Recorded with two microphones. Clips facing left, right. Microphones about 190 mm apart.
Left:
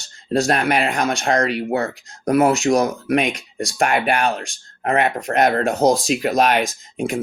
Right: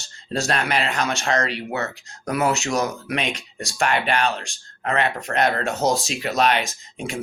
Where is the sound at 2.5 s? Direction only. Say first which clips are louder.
Left 6 dB; 35° left (ahead or behind).